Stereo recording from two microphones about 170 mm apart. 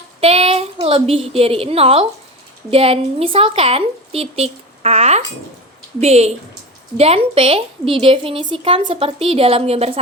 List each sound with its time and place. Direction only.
0.2 s a woman's voice: 35° right (ahead or behind)